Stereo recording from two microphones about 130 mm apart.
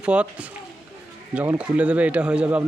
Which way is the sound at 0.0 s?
10° right (ahead or behind).